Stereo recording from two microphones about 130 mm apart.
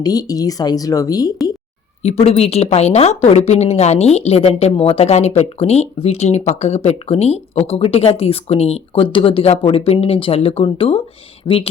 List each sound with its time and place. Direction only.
0.0 s speech: 30° left (ahead or behind)
2.0 s a woman's voice: 50° left (ahead or behind)